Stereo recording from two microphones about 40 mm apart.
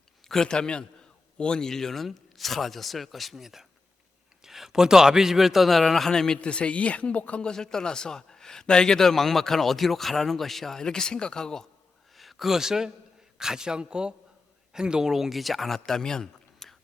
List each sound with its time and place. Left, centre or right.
0.3 s a man's voice: centre
6.4 s speech: left
7.4 s a man's voice: centre
12.1 s a man's voice: centre